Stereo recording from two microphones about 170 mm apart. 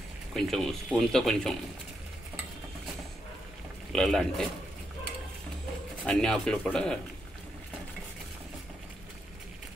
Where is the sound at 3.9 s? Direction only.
Centre (ahead or behind).